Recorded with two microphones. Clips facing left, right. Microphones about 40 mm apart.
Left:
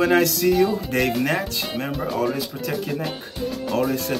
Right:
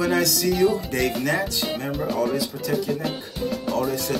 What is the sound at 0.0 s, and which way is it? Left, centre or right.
Speech, left.